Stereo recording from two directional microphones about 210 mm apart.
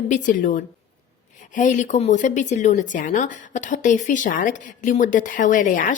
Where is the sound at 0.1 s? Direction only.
35° left (ahead or behind).